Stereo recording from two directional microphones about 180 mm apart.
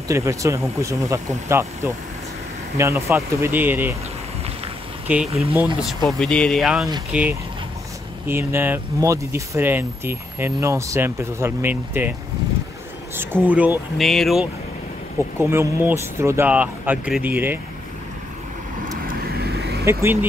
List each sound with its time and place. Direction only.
0.1 s speech: 15° right (ahead or behind)
5.0 s speech: 10° right (ahead or behind)
13.1 s speech: 10° right (ahead or behind)
15.3 s speech: 15° right (ahead or behind)
19.0 s vehicle: 60° right (ahead or behind)
19.8 s speech: 15° right (ahead or behind)